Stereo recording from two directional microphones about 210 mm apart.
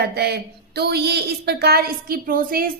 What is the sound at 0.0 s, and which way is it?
A woman's voice, 50° right (ahead or behind).